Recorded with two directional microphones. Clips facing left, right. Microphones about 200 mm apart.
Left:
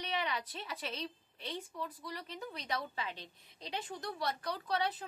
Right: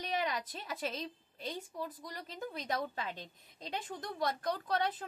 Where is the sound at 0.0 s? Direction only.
45° right (ahead or behind).